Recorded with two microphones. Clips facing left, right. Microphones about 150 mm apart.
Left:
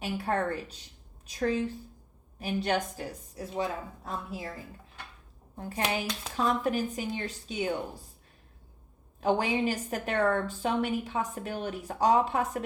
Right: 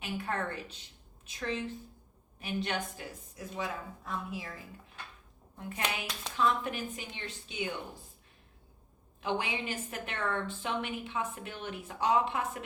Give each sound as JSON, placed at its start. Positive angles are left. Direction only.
{"t": 0.0, "sound": "a woman's voice", "side_deg": 35}
{"t": 5.5, "sound": "a woman's voice", "side_deg": 35}
{"t": 9.2, "sound": "a woman's voice", "side_deg": 40}